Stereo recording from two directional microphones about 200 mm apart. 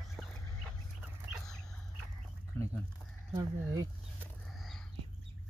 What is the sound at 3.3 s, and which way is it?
Speech, 15° right (ahead or behind).